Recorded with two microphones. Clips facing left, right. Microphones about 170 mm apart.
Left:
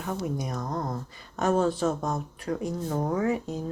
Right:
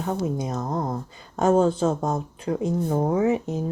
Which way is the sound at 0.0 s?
25° right (ahead or behind).